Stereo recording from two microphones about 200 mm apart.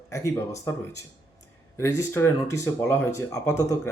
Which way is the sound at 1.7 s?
15° left (ahead or behind).